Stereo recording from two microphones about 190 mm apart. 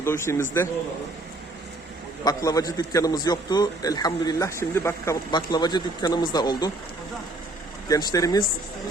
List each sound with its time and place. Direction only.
0.0 s a man's voice: 15° left (ahead or behind)
2.2 s a man's voice: 20° left (ahead or behind)
7.9 s a man's voice: 20° left (ahead or behind)